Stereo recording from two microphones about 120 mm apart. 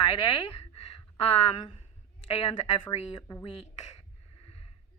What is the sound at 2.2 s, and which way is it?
Speech, 55° left (ahead or behind).